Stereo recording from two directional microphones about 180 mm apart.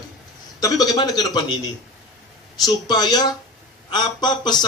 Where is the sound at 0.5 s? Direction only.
20° left (ahead or behind).